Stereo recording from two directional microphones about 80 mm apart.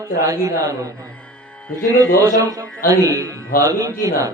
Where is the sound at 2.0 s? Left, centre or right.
Left.